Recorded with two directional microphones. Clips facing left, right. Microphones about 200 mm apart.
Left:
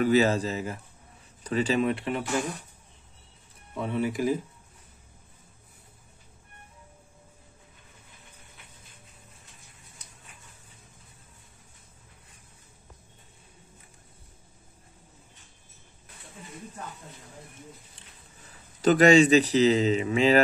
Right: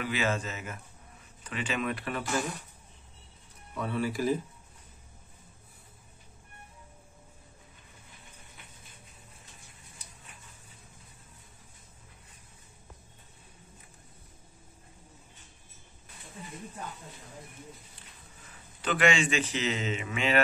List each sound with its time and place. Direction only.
0.0 s speech: 40° left (ahead or behind)
3.7 s speech: 20° left (ahead or behind)
18.8 s speech: 40° left (ahead or behind)